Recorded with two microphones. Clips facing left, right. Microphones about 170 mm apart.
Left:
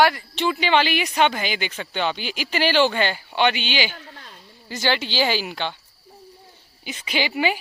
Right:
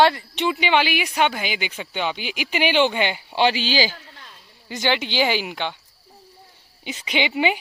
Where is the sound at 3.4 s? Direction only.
30° right (ahead or behind).